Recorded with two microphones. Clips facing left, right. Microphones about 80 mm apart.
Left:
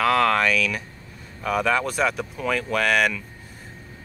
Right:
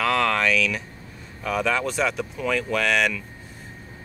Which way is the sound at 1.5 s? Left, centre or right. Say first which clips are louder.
Left 2 dB; centre.